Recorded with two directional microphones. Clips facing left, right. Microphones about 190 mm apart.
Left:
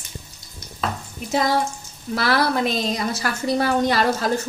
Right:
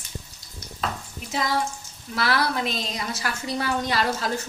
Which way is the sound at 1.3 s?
40° left (ahead or behind).